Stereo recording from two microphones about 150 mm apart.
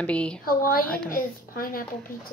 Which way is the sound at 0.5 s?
75° left (ahead or behind).